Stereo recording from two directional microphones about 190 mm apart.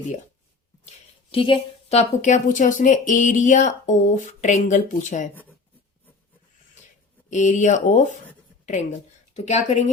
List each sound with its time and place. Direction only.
0.9 s a woman's voice: 30° left (ahead or behind)
7.3 s a woman's voice: 40° left (ahead or behind)
9.3 s speech: 35° left (ahead or behind)